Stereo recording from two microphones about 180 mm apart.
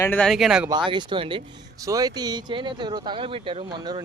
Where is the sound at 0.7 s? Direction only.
25° right (ahead or behind).